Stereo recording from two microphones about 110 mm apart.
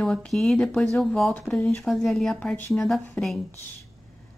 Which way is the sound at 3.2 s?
15° left (ahead or behind).